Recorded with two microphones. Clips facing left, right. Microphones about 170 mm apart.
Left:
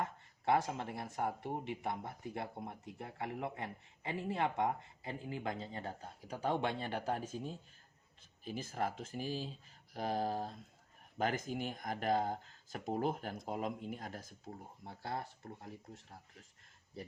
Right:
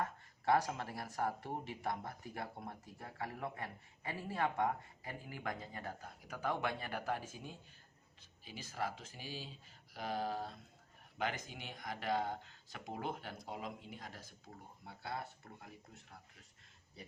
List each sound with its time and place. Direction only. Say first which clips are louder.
0.0 s speech: left 1 dB; 20° left (ahead or behind)
8.4 s speech: left 4 dB; 50° left (ahead or behind)
14.4 s speech: left 5 dB; 35° left (ahead or behind)